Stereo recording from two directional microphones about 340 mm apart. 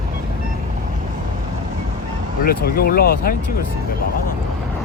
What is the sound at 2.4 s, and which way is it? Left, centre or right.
Speech, left.